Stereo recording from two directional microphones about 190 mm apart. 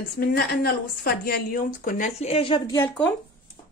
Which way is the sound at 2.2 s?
30° left (ahead or behind).